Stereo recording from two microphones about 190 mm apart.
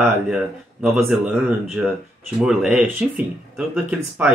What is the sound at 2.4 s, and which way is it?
Speech, 5° right (ahead or behind).